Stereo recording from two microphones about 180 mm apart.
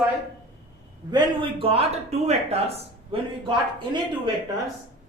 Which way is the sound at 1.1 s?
30° right (ahead or behind).